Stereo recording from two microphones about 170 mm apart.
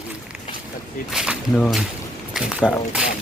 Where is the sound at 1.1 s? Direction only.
Centre (ahead or behind).